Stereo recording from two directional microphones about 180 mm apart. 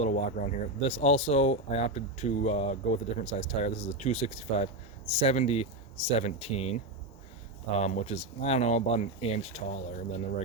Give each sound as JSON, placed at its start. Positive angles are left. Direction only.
{"t": 0.0, "sound": "speech", "side_deg": 35}
{"t": 7.8, "sound": "speech", "side_deg": 40}